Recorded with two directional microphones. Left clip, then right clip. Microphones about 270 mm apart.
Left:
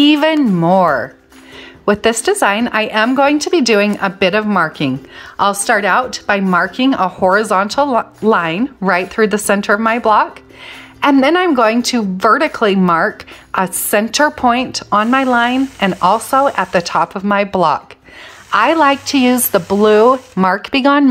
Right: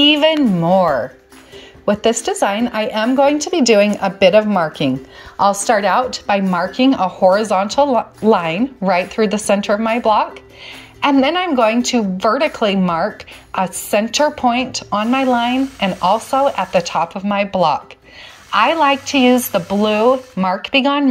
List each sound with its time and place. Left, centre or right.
0.0 s a woman's voice: centre